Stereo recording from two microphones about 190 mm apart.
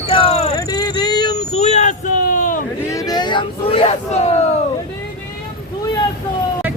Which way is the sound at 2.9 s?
20° left (ahead or behind).